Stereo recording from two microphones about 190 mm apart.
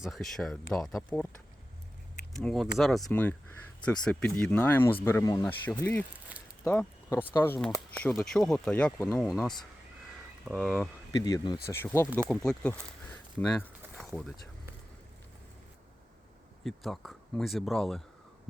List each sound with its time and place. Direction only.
0.0 s speech: centre (ahead or behind)
2.3 s speech: centre (ahead or behind)
10.6 s speech: centre (ahead or behind)
11.2 s speech: 20° left (ahead or behind)
13.9 s a sound: centre (ahead or behind)
16.6 s speech: centre (ahead or behind)